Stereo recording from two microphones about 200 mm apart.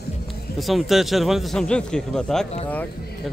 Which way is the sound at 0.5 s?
Centre (ahead or behind).